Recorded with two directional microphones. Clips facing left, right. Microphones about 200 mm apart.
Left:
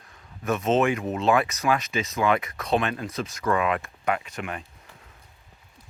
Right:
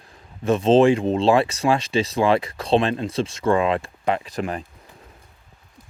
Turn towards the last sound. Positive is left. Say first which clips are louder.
# right 7 dB
turn(degrees=-35)  # may be behind; listen again after turning